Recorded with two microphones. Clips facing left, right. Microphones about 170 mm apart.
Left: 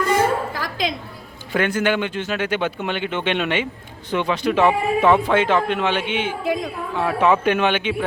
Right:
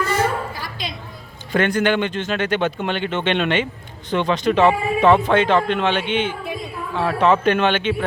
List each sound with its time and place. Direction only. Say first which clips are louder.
0.5 s bow-wow: left 6 dB; 90° left
1.5 s speech: right 2 dB; 5° left (ahead or behind)
6.4 s a woman's voice: left 6 dB; 90° left
7.0 s speech: right 1 dB; 5° left (ahead or behind)